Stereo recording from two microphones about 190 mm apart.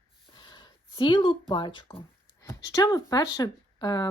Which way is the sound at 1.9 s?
10° left (ahead or behind).